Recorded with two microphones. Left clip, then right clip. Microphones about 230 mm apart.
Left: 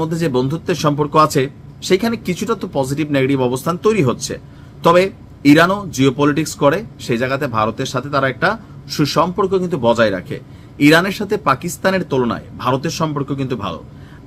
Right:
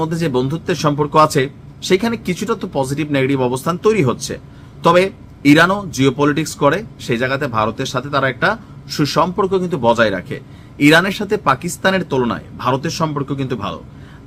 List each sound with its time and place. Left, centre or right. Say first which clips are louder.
0.0 s speech: even; centre